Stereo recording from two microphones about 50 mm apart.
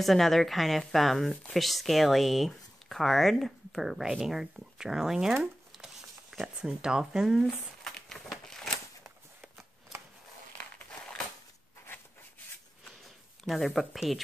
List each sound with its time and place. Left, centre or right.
0.0 s speech: centre
5.4 s a sound: centre
6.4 s speech: centre
8.2 s a sound: centre
10.6 s walk: left
13.4 s speech: centre